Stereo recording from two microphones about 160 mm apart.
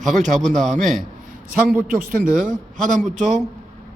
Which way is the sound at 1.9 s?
60° right (ahead or behind).